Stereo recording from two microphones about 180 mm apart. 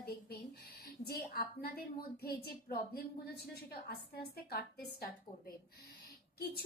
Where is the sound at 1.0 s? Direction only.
55° left (ahead or behind).